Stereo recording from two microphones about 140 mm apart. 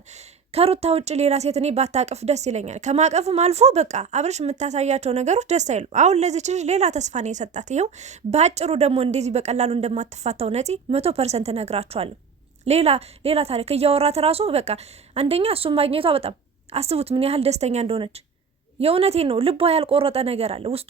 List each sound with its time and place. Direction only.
0.5 s speech: 45° right (ahead or behind)